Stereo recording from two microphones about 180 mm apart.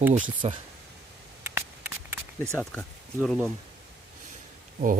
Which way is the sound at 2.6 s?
5° left (ahead or behind).